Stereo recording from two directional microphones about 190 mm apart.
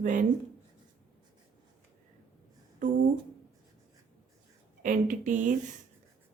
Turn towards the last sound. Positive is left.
turn(degrees=-45)  # may be behind; listen again after turning